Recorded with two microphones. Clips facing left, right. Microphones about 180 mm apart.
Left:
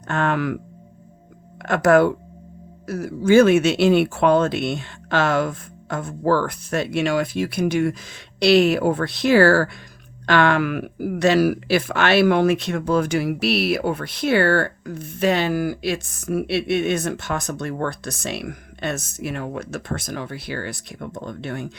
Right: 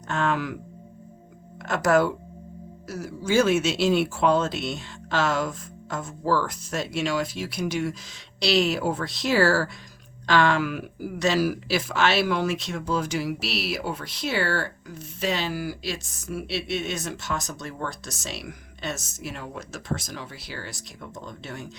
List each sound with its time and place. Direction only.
0.1 s speech: 60° left (ahead or behind)
1.6 s speech: 60° left (ahead or behind)